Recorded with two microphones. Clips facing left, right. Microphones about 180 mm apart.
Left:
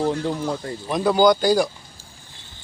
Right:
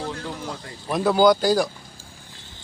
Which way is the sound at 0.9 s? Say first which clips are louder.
Even; 5° right (ahead or behind).